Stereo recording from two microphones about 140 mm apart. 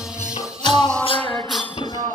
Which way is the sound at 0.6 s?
30° left (ahead or behind).